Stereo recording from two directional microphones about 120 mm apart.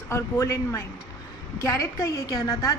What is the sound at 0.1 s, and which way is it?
A woman's voice, 25° left (ahead or behind).